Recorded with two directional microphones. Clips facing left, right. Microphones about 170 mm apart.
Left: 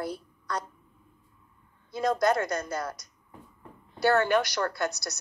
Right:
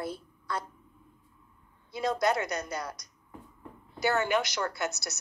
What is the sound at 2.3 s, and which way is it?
Speech, 50° left (ahead or behind).